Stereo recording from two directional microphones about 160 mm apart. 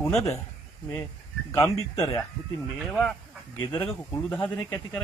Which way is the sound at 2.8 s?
5° left (ahead or behind).